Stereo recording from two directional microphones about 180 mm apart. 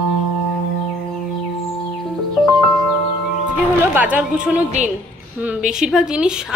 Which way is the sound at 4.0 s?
10° right (ahead or behind).